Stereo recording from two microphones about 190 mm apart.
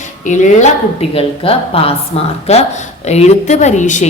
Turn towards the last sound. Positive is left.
turn(degrees=40)  # may be behind; listen again after turning